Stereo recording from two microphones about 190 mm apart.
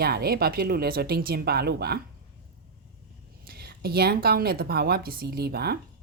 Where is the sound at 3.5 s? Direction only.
55° right (ahead or behind).